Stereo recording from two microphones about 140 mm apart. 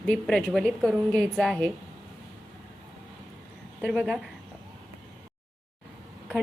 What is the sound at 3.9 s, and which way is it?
Speech, 5° right (ahead or behind).